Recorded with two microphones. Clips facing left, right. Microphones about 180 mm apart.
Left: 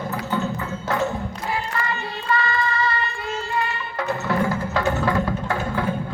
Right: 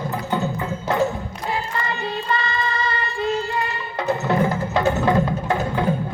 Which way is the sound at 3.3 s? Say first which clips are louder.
Right 4 dB; 35° right (ahead or behind).